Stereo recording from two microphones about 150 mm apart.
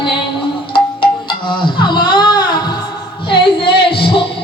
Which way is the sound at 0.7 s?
35° left (ahead or behind).